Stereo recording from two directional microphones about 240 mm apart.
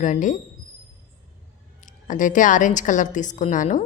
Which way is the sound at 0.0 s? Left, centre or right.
Left.